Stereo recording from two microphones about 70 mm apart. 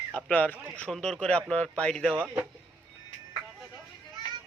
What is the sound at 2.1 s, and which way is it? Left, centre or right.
Speech, centre.